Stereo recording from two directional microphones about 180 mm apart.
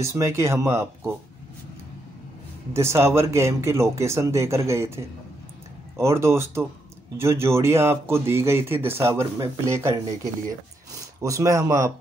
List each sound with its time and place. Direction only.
0.0 s speech: 15° right (ahead or behind)
2.7 s speech: 15° right (ahead or behind)